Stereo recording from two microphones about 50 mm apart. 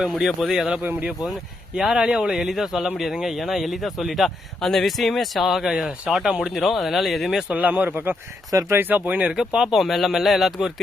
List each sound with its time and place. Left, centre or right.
0.0 s a man's voice: centre
1.7 s a man's voice: centre
6.6 s a man's voice: centre
7.5 s speech: right
9.2 s speech: right
9.7 s a man's voice: centre